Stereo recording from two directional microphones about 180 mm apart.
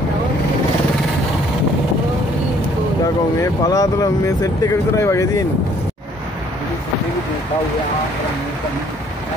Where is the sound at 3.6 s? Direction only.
20° left (ahead or behind).